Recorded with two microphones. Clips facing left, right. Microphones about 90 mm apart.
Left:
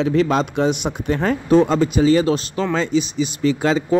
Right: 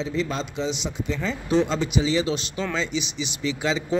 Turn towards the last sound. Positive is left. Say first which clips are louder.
# left 7 dB
turn(degrees=50)  # may be behind; listen again after turning